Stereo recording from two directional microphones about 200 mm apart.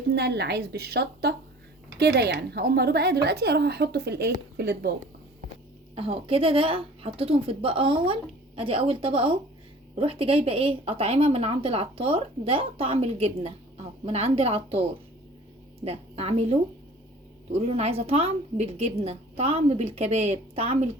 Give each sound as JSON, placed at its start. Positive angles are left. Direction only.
{"t": 0.1, "sound": "a woman's voice", "side_deg": -55}
{"t": 5.9, "sound": "a woman's voice", "side_deg": -30}